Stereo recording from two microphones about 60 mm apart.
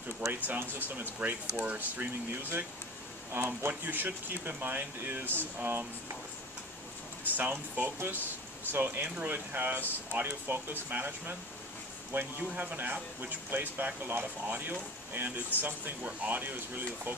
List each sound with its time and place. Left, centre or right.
0.3 s speech: right
3.3 s speech: right
7.3 s speech: right